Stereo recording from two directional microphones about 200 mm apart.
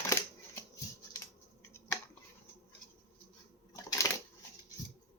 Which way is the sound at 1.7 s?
10° left (ahead or behind).